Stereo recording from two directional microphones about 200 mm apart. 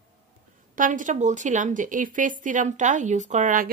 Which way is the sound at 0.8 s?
40° right (ahead or behind).